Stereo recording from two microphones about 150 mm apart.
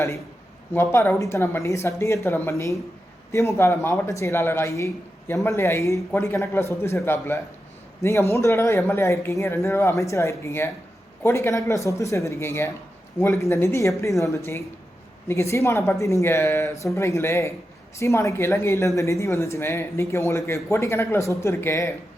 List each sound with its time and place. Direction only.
0.7 s speech: 15° left (ahead or behind)